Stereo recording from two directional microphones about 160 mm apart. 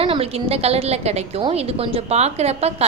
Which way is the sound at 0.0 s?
35° right (ahead or behind).